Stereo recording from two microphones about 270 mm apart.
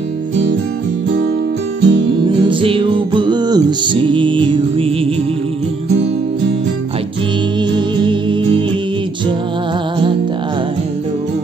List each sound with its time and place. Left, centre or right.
1.8 s music: right
2.2 s music: centre
7.7 s music: centre